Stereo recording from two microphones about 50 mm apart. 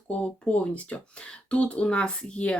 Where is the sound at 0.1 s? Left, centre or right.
Left.